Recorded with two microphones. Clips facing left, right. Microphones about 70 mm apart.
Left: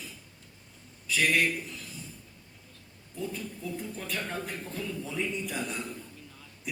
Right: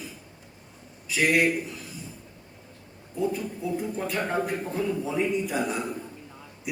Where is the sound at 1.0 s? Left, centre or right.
Centre.